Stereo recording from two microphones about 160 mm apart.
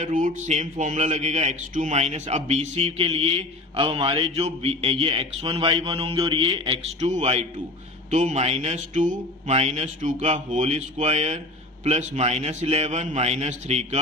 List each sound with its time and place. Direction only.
0.0 s a man's voice: 55° right (ahead or behind); by 7.1 s 35° right (ahead or behind)
7.1 s speech: 45° right (ahead or behind)